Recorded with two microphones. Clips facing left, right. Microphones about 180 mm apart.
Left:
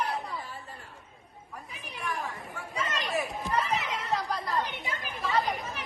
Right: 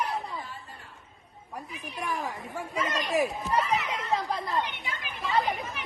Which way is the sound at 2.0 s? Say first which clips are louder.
Right 2 dB; 40° right (ahead or behind).